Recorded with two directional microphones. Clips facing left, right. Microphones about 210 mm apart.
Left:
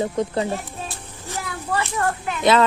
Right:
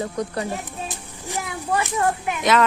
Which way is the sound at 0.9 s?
15° right (ahead or behind).